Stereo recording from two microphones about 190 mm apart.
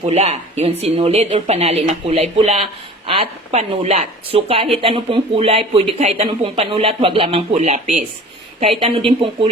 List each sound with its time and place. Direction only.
0.0 s speech: 35° right (ahead or behind)
9.0 s speech: 30° right (ahead or behind)